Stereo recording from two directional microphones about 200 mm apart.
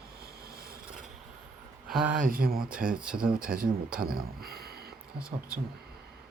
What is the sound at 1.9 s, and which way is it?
Speech, centre (ahead or behind).